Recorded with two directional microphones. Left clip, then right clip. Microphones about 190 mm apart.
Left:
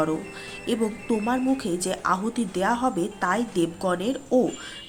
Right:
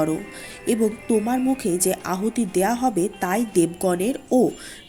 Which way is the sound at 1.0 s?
35° right (ahead or behind).